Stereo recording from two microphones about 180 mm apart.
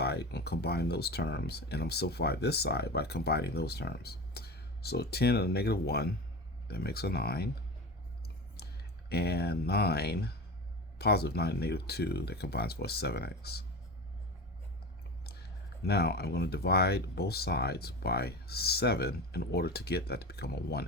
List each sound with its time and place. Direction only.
0.0 s speech: 65° left (ahead or behind)
8.5 s speech: 60° left (ahead or behind)
15.9 s speech: 60° left (ahead or behind)